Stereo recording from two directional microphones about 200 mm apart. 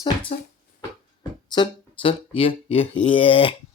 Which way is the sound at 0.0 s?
25° left (ahead or behind).